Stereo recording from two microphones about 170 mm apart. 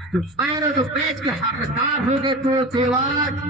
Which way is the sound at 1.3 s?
25° right (ahead or behind).